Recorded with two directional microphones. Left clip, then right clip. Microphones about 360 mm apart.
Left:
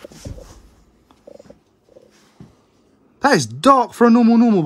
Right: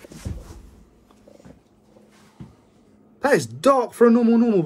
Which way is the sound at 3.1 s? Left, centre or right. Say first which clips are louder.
Left 4 dB; left.